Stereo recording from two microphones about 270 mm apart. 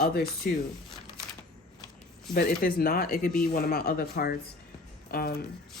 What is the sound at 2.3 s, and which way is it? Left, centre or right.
Speech, left.